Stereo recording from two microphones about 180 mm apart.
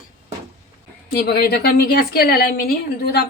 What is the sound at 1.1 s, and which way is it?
A woman's voice, 55° left (ahead or behind).